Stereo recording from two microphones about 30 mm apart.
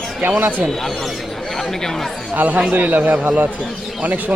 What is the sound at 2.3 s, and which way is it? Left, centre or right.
A man's voice, right.